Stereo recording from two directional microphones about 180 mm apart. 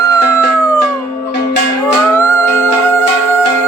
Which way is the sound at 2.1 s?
15° left (ahead or behind).